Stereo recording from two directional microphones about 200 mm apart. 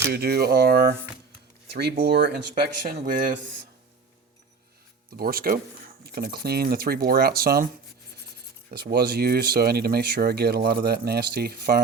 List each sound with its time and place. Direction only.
0.1 s speech: 50° right (ahead or behind)
5.1 s speech: 45° right (ahead or behind)
8.7 s speech: 50° right (ahead or behind)